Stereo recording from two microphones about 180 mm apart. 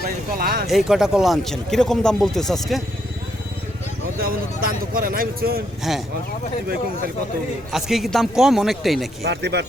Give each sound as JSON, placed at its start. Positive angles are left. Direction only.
{"t": 0.3, "sound": "speech", "side_deg": -55}
{"t": 0.7, "sound": "speech", "side_deg": 0}
{"t": 4.2, "sound": "speech", "side_deg": -55}
{"t": 5.9, "sound": "speech", "side_deg": 0}
{"t": 7.7, "sound": "speech", "side_deg": 0}
{"t": 9.2, "sound": "speech", "side_deg": -65}